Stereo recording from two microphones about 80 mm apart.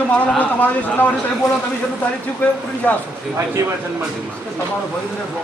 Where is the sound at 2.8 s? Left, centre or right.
Centre.